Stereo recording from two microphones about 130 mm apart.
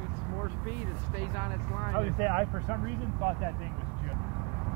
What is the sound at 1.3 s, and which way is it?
Speech, 25° right (ahead or behind).